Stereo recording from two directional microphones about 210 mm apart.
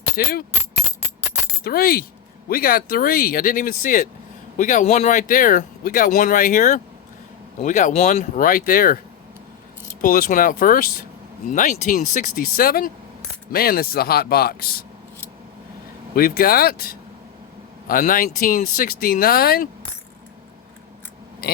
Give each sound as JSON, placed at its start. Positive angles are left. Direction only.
{"t": 0.2, "sound": "speech", "side_deg": 45}
{"t": 1.6, "sound": "speech", "side_deg": 45}
{"t": 10.0, "sound": "speech", "side_deg": 40}
{"t": 16.1, "sound": "speech", "side_deg": 45}